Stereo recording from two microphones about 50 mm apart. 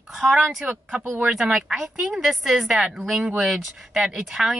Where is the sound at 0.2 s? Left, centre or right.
Centre.